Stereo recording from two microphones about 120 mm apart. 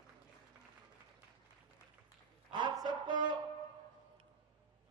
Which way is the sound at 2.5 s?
40° right (ahead or behind).